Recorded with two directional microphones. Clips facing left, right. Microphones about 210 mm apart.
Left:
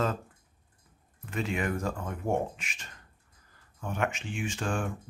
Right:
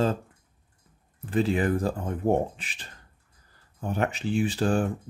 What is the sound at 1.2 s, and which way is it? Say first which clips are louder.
Speech: right 7 dB; 35° right (ahead or behind).